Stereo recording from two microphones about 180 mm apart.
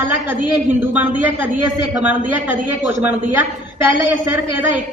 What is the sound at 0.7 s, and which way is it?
Speech, 10° right (ahead or behind).